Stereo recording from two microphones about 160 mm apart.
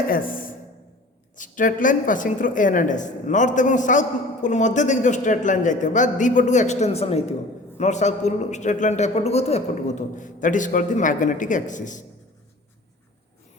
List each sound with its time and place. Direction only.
0.1 s a woman's voice: 60° left (ahead or behind)